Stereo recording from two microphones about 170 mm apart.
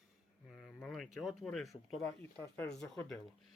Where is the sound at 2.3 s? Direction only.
10° left (ahead or behind).